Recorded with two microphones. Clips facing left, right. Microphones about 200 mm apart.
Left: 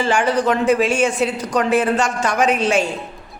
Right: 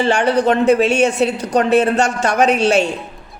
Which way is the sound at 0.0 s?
65° right (ahead or behind).